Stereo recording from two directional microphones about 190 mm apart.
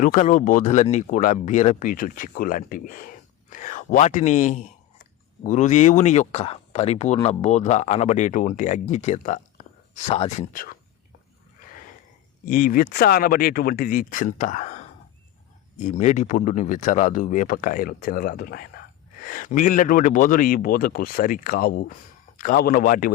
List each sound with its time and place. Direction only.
0.0 s speech: 40° left (ahead or behind)
12.5 s speech: 45° left (ahead or behind)